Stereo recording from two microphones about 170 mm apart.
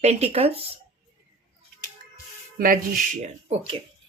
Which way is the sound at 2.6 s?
55° right (ahead or behind).